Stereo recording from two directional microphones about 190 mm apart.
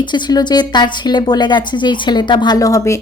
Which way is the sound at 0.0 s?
25° left (ahead or behind).